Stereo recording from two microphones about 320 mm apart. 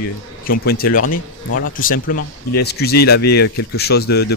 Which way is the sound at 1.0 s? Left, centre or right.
Left.